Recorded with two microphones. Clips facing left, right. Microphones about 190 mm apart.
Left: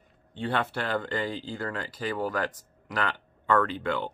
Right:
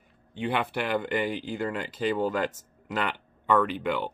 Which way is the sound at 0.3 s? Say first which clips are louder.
Right 1 dB; 15° right (ahead or behind).